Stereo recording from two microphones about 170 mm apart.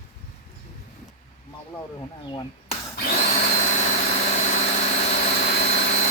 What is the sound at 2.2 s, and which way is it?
Speech, 25° left (ahead or behind).